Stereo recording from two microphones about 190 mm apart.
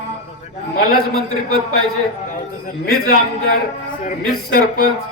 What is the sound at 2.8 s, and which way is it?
Speech, 50° left (ahead or behind).